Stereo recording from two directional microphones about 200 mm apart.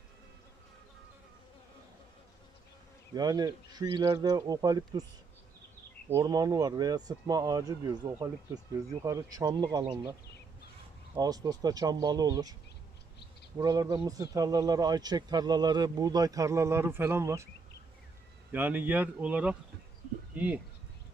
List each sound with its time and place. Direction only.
3.2 s speech: 20° right (ahead or behind)
6.1 s speech: 15° right (ahead or behind)
11.1 s speech: 20° right (ahead or behind)
13.6 s speech: 20° right (ahead or behind)
18.5 s speech: 10° right (ahead or behind)